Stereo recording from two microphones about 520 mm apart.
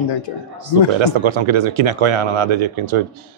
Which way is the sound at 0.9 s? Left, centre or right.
Right.